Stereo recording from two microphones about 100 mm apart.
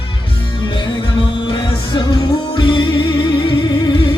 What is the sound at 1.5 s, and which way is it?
Music, 60° left (ahead or behind).